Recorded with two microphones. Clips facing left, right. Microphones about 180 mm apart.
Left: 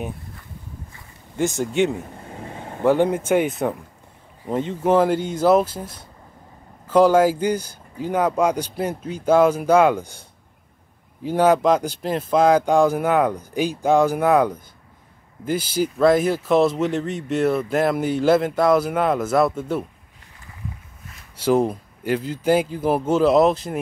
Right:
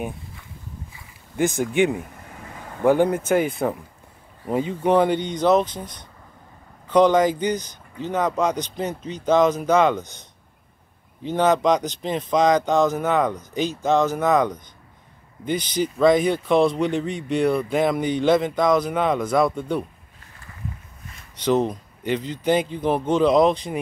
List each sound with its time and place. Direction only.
1.3 s speech: centre (ahead or behind)
2.1 s a sound: 30° left (ahead or behind)
2.8 s speech: 15° right (ahead or behind)
3.1 s speech: 10° left (ahead or behind)
11.2 s speech: 10° left (ahead or behind)
21.4 s speech: 10° left (ahead or behind)